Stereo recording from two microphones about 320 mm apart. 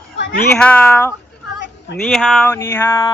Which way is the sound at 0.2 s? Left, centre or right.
Left.